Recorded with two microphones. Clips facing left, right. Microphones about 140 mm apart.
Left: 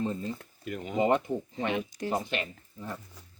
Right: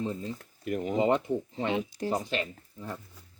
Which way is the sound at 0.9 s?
25° right (ahead or behind).